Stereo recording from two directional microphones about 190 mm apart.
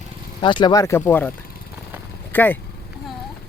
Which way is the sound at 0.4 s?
25° left (ahead or behind).